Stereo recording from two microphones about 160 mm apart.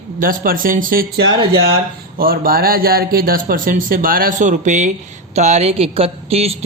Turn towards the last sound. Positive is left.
turn(degrees=-40)  # may be behind; listen again after turning